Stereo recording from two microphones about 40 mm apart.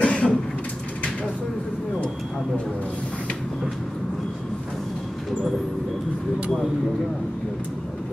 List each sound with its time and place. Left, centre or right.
0.0 s throat clearing: left